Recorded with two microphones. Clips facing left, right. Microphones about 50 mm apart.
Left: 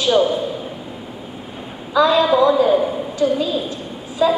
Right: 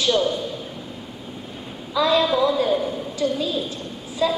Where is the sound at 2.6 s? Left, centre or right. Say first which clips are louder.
Left 6 dB; left.